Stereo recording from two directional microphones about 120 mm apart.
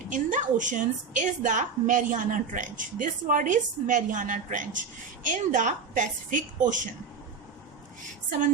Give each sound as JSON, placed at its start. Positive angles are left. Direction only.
{"t": 0.1, "sound": "a woman's voice", "side_deg": -90}